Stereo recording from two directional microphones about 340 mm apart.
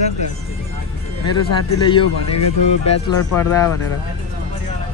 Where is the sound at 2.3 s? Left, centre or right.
Left.